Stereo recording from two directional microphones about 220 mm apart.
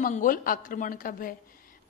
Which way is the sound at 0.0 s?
35° left (ahead or behind).